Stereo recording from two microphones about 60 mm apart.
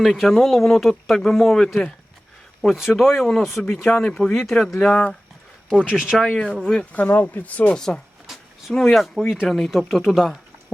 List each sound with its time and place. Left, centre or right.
0.0 s speech: centre
2.6 s speech: centre
5.6 s speech: centre
6.3 s speech: centre
7.8 s a sound: centre
8.8 s speech: centre